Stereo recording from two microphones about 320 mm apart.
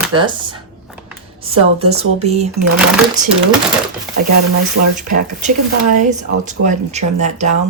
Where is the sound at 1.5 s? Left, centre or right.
Centre.